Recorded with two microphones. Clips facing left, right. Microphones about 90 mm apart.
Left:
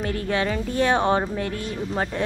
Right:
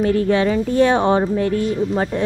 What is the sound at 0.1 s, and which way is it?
Speech, 30° right (ahead or behind).